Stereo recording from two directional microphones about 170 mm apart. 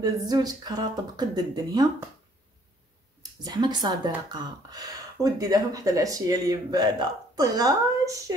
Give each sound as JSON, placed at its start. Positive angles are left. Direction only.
{"t": 0.0, "sound": "speech", "side_deg": -20}
{"t": 3.2, "sound": "speech", "side_deg": -25}